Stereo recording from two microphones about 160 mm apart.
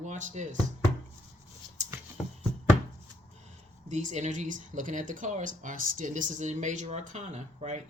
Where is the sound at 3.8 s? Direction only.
50° right (ahead or behind).